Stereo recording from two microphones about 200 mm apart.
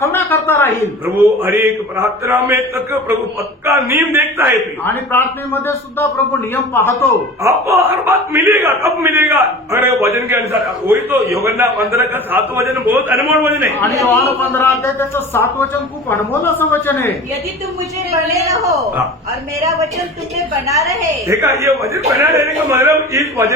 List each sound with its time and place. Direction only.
0.0 s a sound: 10° left (ahead or behind)
1.0 s speech: 10° right (ahead or behind)
3.7 s speech: 15° right (ahead or behind)
4.9 s a man's voice: 10° left (ahead or behind)
7.4 s speech: 15° right (ahead or behind)
11.4 s speech: 15° right (ahead or behind)
14.0 s a man's voice: 15° left (ahead or behind)
18.1 s speech: 15° right (ahead or behind)